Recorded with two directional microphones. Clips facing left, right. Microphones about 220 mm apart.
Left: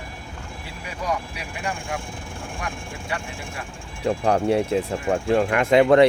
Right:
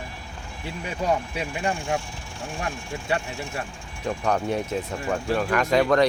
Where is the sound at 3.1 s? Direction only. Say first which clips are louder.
Right 5 dB; 25° right (ahead or behind).